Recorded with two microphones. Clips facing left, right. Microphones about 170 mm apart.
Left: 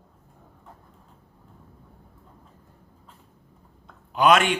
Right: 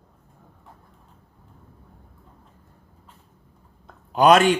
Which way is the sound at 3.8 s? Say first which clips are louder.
Right 3 dB; 40° right (ahead or behind).